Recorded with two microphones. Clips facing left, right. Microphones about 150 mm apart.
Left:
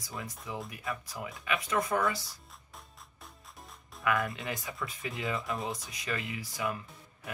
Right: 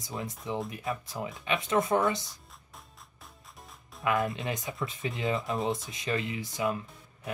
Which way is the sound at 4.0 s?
25° right (ahead or behind).